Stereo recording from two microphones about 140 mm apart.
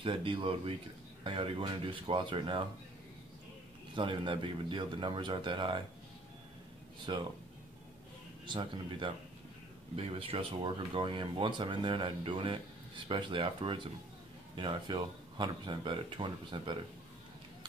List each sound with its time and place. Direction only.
0.0 s speech: 35° right (ahead or behind)
3.9 s speech: 35° right (ahead or behind)
7.1 s speech: 35° right (ahead or behind)
8.5 s speech: 40° right (ahead or behind)